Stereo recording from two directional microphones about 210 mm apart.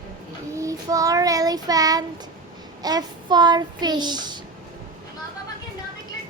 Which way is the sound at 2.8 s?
20° right (ahead or behind).